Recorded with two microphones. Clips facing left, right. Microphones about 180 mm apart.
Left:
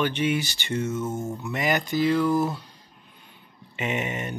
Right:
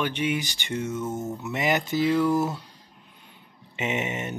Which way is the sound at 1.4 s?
20° right (ahead or behind).